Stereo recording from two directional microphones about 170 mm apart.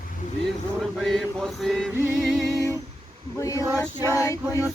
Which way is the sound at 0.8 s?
Centre (ahead or behind).